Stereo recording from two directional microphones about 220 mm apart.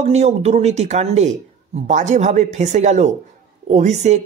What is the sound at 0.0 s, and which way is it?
Speech, 30° right (ahead or behind).